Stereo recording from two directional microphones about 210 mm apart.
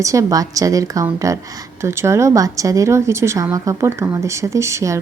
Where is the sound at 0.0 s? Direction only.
15° right (ahead or behind).